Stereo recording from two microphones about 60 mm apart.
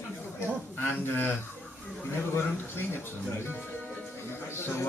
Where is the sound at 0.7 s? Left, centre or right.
Left.